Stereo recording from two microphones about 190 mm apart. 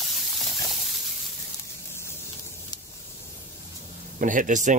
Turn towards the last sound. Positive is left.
turn(degrees=-40)  # may be behind; listen again after turning